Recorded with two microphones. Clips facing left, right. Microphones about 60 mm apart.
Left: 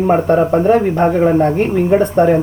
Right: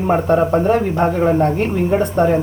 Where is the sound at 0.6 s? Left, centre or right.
Left.